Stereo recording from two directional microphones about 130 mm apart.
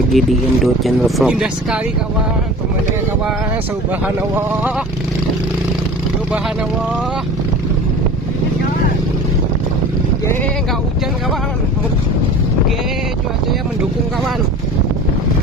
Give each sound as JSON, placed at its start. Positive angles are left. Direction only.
{"t": 0.1, "sound": "speech", "side_deg": 0}
{"t": 4.0, "sound": "speech", "side_deg": -15}